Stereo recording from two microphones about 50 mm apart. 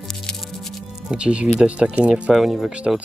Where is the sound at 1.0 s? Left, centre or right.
Right.